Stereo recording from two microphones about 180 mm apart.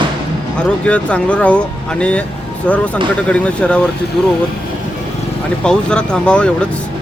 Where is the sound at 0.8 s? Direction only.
5° left (ahead or behind).